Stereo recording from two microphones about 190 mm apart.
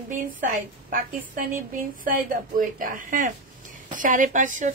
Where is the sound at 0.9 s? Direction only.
45° right (ahead or behind).